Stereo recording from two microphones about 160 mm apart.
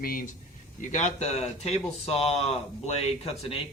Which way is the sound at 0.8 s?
50° left (ahead or behind).